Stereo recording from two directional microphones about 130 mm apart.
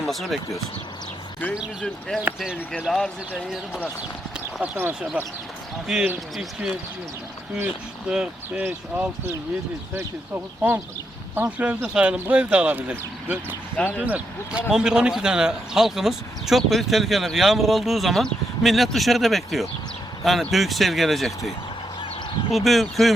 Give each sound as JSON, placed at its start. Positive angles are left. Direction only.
{"t": 0.0, "sound": "speech", "side_deg": 0}
{"t": 1.8, "sound": "speech", "side_deg": 5}
{"t": 6.3, "sound": "speech", "side_deg": -5}
{"t": 8.1, "sound": "speech", "side_deg": -10}
{"t": 22.5, "sound": "speech", "side_deg": 0}